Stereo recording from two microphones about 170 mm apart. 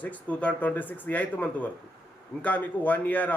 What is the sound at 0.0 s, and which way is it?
A man's voice, 10° left (ahead or behind).